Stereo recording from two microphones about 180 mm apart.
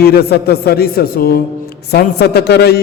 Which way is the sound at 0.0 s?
60° left (ahead or behind).